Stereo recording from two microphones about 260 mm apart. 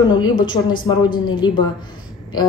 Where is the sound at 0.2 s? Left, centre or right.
Centre.